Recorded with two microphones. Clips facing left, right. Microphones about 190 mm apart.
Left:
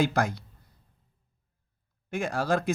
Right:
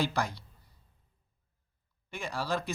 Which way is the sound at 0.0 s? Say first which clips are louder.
Left 6 dB; 50° left (ahead or behind).